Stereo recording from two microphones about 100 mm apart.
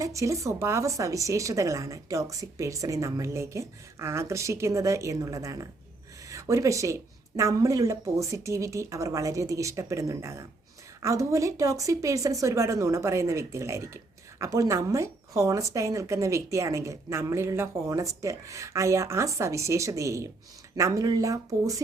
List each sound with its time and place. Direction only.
0.0 s speech: 30° right (ahead or behind)